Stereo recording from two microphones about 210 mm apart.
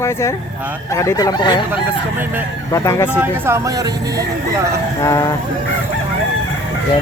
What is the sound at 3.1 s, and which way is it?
Speech, 15° right (ahead or behind).